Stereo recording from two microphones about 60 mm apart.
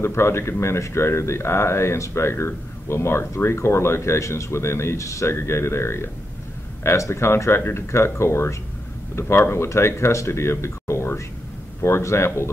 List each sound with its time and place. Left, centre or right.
0.0 s speech: left